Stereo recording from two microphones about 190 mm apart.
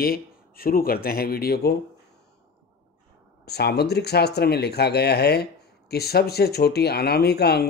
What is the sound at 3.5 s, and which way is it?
Speech, 60° left (ahead or behind).